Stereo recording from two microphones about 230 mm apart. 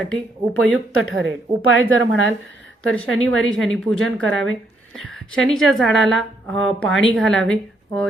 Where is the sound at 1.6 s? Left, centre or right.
Left.